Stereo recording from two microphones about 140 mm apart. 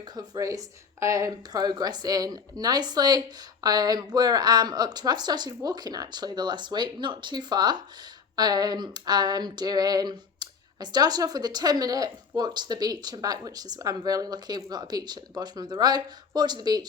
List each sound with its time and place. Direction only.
0.0 s speech: 25° right (ahead or behind)